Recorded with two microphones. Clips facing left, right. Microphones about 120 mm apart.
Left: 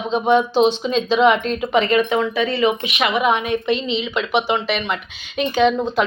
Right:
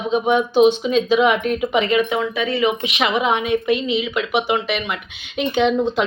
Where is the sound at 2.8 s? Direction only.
25° right (ahead or behind).